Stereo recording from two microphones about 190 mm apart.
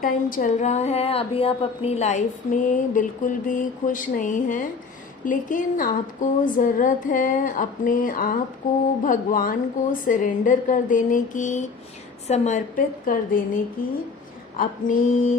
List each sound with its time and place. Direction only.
0.0 s a woman's voice: 45° left (ahead or behind)
14.6 s a woman's voice: 45° left (ahead or behind)